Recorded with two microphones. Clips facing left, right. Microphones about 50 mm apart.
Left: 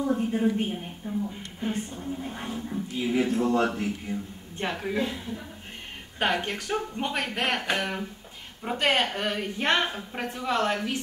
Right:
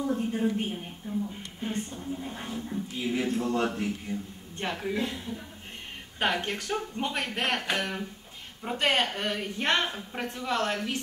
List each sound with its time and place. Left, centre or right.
0.0 s a woman's voice: centre